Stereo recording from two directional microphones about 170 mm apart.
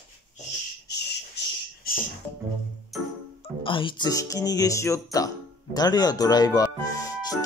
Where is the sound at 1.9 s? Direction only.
60° left (ahead or behind).